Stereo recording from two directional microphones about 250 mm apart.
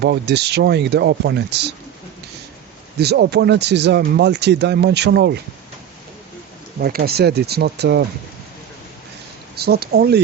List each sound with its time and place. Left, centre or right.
0.0 s speech: right
3.0 s speech: right
6.8 s speech: right
9.6 s speech: right